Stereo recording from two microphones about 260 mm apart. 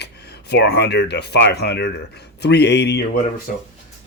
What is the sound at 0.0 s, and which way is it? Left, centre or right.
Speech, left.